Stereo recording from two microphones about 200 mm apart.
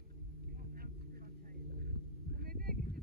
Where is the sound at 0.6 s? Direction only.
45° right (ahead or behind).